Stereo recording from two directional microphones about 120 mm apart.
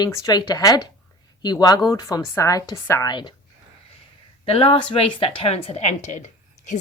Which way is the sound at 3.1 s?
40° left (ahead or behind).